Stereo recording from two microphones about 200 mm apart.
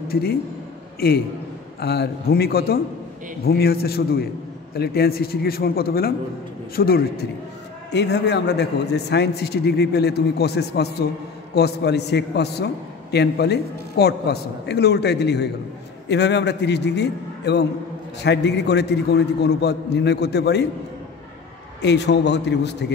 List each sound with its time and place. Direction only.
0.1 s a man's voice: 50° left (ahead or behind)
7.9 s a man's voice: 60° left (ahead or behind)
21.8 s a man's voice: 60° left (ahead or behind)